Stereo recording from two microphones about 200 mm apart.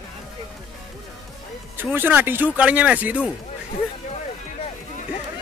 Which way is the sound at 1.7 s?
10° right (ahead or behind).